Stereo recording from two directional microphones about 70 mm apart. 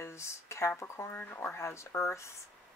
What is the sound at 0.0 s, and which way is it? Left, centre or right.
Speech, left.